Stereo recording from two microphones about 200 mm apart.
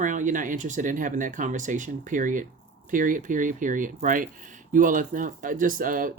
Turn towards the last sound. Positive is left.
turn(degrees=-45)  # may be behind; listen again after turning